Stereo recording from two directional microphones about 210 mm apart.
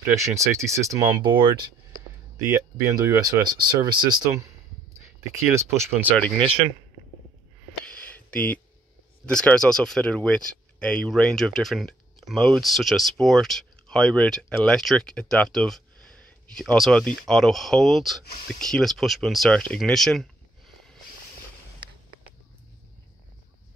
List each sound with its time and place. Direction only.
0.0 s speech: 15° right (ahead or behind)
7.8 s a sound: 5° left (ahead or behind)
9.2 s speech: 5° left (ahead or behind)